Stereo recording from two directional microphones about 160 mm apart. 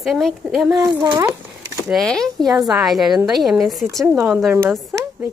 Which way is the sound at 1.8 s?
Centre (ahead or behind).